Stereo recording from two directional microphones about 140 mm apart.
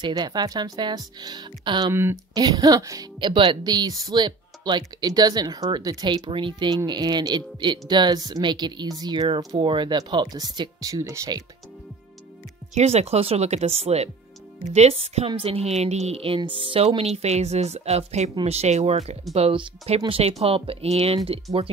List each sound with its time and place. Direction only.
0.0 s speech: 30° right (ahead or behind)
12.7 s a woman's voice: 50° right (ahead or behind)